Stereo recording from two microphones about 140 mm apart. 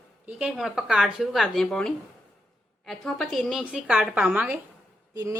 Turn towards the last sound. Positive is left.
turn(degrees=-20)  # may be behind; listen again after turning